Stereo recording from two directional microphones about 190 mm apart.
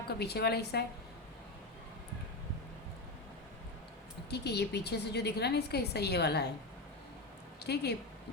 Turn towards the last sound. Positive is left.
turn(degrees=60)  # may be behind; listen again after turning